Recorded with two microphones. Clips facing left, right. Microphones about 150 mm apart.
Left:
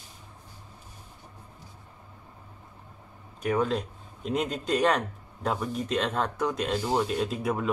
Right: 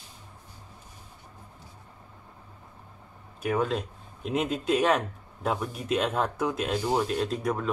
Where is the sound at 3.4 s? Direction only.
5° right (ahead or behind).